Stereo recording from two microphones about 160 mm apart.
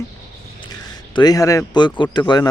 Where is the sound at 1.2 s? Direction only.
25° left (ahead or behind).